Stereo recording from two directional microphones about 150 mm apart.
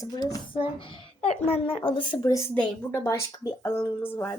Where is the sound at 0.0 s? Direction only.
25° left (ahead or behind).